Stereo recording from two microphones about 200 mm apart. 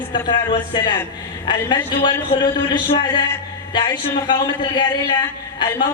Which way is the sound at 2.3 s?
20° left (ahead or behind).